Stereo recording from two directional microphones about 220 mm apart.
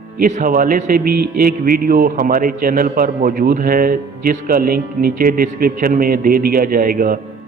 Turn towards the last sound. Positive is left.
turn(degrees=-40)  # may be behind; listen again after turning